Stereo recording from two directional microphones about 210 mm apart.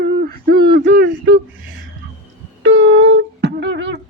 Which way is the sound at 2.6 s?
60° right (ahead or behind).